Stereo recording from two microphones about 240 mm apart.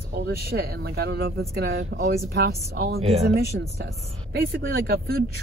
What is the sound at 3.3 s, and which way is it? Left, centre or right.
Speech, right.